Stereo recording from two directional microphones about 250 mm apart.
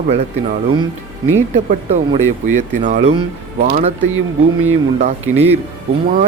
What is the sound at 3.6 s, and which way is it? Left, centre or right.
Speech, right.